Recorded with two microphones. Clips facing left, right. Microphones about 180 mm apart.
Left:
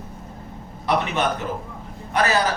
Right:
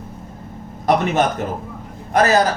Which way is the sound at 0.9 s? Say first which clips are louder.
Right 5 dB; 50° right (ahead or behind).